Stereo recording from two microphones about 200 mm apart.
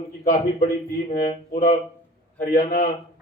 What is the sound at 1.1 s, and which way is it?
Speech, 45° left (ahead or behind).